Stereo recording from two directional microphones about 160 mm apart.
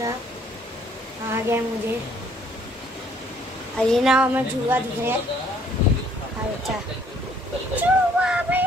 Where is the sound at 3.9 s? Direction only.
5° right (ahead or behind).